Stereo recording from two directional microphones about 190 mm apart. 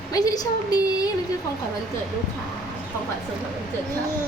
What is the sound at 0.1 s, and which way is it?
A woman's voice, 20° left (ahead or behind).